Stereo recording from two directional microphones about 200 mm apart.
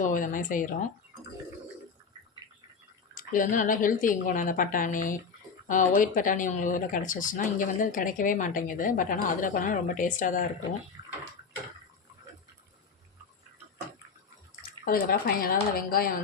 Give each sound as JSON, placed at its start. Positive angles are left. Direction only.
{"t": 0.0, "sound": "speech", "side_deg": 40}
{"t": 3.2, "sound": "speech", "side_deg": 40}
{"t": 14.8, "sound": "speech", "side_deg": 45}